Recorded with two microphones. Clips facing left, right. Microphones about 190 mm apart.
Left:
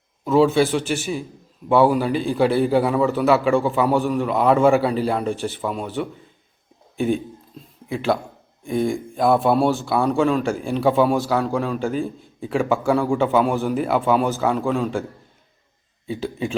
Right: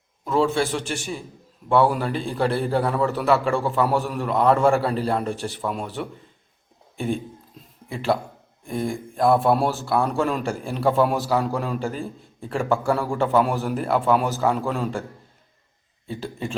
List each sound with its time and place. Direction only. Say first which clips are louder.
0.3 s a man's voice: left 5 dB; 5° left (ahead or behind)
16.0 s a man's voice: left 4 dB; centre (ahead or behind)